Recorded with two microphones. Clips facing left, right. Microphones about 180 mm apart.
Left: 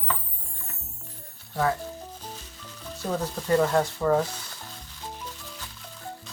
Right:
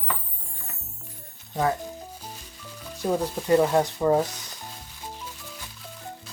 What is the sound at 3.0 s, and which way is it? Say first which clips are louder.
Speech: right 4 dB; 10° right (ahead or behind).